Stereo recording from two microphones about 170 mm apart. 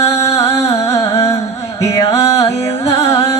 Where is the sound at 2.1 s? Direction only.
35° left (ahead or behind).